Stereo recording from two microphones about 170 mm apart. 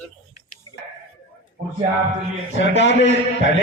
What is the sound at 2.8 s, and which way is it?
Speech, 90° left.